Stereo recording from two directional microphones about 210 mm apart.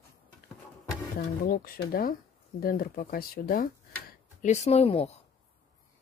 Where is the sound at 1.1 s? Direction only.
45° left (ahead or behind); by 5.1 s 30° left (ahead or behind).